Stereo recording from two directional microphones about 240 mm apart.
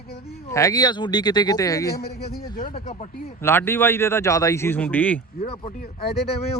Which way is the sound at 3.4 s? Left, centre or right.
Centre.